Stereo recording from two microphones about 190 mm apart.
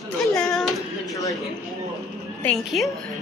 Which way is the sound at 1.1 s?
20° left (ahead or behind).